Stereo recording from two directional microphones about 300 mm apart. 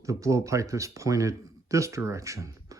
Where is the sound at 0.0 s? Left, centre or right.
Centre.